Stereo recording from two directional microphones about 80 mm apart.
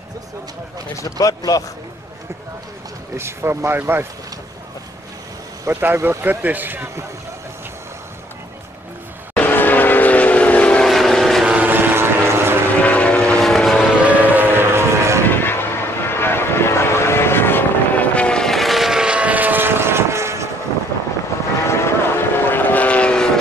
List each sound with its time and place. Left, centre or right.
0.9 s speech: left
3.2 s speech: right
5.7 s speech: right
9.3 s vehicle: left
10.9 s vehicle: centre
11.4 s vehicle: centre
12.8 s vehicle: centre
13.4 s vehicle: centre
14.0 s train: right
15.2 s vehicle: left; by 20.4 s right
21.6 s vehicle: left; by 23.4 s centre